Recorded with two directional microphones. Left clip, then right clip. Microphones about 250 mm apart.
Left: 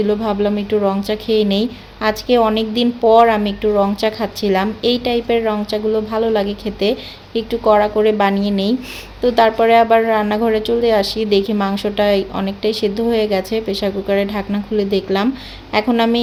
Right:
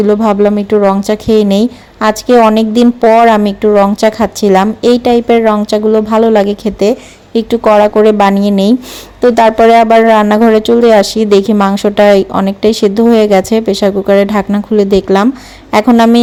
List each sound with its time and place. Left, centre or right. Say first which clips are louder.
0.0 s a woman's voice: right 9 dB; right